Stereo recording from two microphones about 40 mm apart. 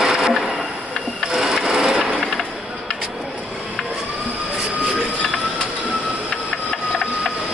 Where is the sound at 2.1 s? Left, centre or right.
Centre.